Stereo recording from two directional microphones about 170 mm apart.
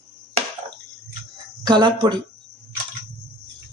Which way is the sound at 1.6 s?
25° right (ahead or behind).